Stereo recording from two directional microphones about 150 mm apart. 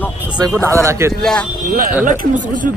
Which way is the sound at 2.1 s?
60° right (ahead or behind).